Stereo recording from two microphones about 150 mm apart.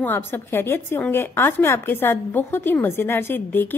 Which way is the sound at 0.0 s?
15° left (ahead or behind).